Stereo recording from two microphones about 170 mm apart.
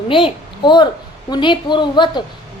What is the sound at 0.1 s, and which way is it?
A child's voice, 30° left (ahead or behind).